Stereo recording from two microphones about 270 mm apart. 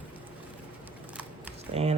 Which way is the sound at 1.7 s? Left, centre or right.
Right.